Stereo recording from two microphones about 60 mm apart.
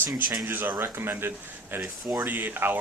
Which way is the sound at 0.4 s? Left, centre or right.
Right.